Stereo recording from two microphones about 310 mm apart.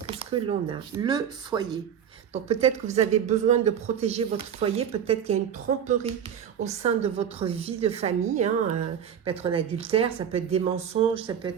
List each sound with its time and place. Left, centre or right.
0.2 s speech: centre